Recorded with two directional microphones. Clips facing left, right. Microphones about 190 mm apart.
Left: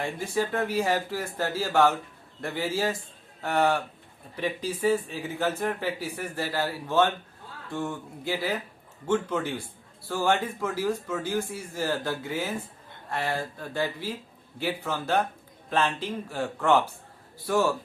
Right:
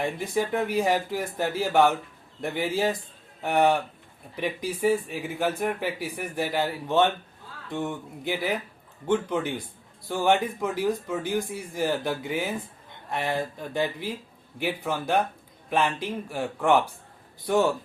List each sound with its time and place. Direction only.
0.3 s a man's voice: 15° right (ahead or behind)